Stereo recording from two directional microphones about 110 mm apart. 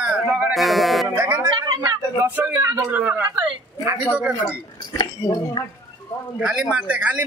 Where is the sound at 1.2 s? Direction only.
20° right (ahead or behind).